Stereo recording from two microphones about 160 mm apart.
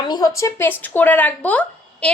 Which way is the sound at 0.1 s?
20° left (ahead or behind).